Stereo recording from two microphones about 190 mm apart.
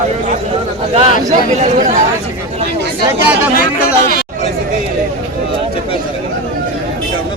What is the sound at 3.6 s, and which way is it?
Speech, 50° left (ahead or behind).